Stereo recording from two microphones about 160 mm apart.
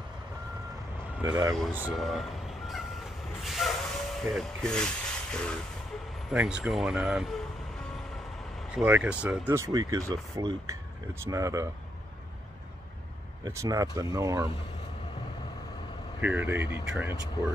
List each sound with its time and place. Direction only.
1.9 s speech: centre (ahead or behind)
6.3 s speech: 5° right (ahead or behind)
8.7 s speech: 10° right (ahead or behind)
13.4 s speech: 20° right (ahead or behind)
16.2 s speech: 10° right (ahead or behind)